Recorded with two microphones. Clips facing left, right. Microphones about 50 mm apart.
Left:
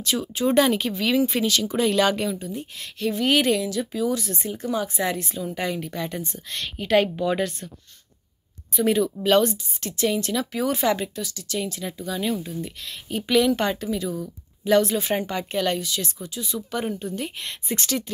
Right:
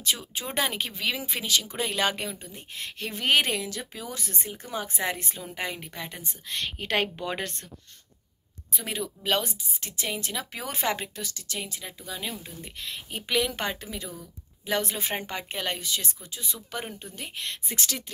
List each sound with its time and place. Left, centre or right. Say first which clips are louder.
0.0 s speech: left 8 dB; centre
6.8 s speech: left 9 dB; right
8.7 s speech: left 12 dB; centre; by 11.6 s right
11.8 s speech: left 9 dB; centre
16.8 s speech: left 10 dB; centre
17.4 s speech: left 4 dB; centre